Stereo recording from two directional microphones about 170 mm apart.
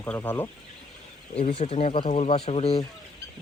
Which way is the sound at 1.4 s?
35° left (ahead or behind).